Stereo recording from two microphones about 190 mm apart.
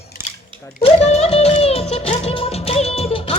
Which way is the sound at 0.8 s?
35° left (ahead or behind).